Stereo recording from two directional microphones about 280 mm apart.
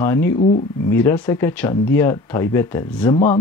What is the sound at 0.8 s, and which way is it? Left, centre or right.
Speech, centre.